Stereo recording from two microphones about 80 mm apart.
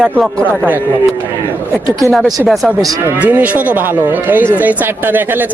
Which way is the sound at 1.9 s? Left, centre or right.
Right.